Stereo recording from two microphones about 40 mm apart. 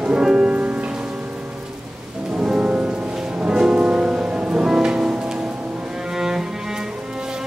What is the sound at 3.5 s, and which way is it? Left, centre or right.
Music, right.